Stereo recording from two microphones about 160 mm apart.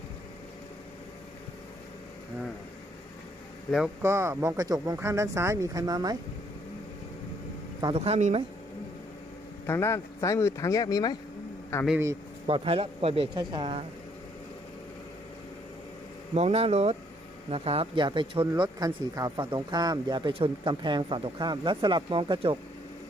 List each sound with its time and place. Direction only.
4.0 s speech: 15° right (ahead or behind)
7.9 s speech: 40° right (ahead or behind)
9.6 s speech: 15° left (ahead or behind)
12.5 s speech: 35° right (ahead or behind)
16.3 s speech: 40° right (ahead or behind)